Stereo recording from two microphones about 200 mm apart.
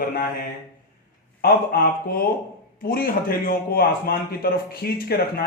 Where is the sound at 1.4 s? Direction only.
50° left (ahead or behind).